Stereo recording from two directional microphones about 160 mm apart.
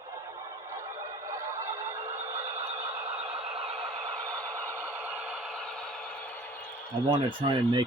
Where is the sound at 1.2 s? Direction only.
20° right (ahead or behind).